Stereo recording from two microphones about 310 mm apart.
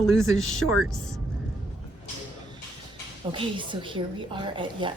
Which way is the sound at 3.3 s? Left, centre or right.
Centre.